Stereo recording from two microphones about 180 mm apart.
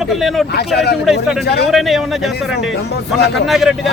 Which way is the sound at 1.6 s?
Centre (ahead or behind).